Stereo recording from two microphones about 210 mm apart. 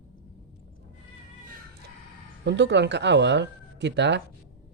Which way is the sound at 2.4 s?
55° right (ahead or behind).